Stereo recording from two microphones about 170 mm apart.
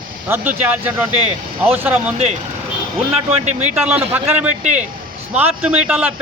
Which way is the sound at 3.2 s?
40° right (ahead or behind).